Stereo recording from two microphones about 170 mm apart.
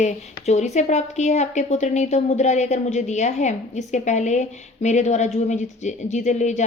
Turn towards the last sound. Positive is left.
turn(degrees=45)  # may be behind; listen again after turning